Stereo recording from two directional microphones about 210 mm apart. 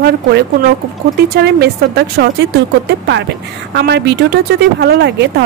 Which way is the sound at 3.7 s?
55° right (ahead or behind).